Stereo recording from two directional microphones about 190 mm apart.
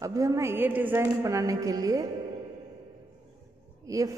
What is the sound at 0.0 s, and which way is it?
A man's voice, 15° right (ahead or behind).